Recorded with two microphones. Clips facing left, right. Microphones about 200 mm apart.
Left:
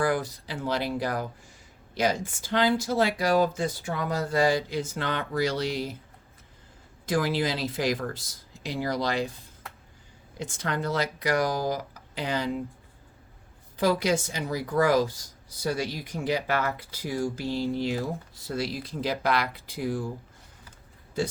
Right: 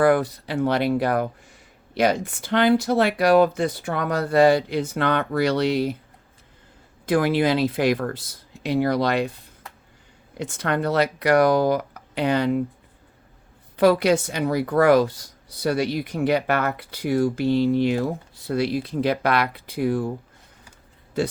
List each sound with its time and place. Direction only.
0.0 s speech: 60° right (ahead or behind)
7.0 s speech: 60° right (ahead or behind)
10.3 s speech: 65° right (ahead or behind)
13.7 s speech: 65° right (ahead or behind)